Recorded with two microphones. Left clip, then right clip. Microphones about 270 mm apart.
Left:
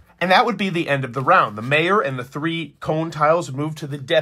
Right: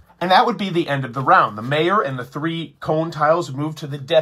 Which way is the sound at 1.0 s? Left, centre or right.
Left.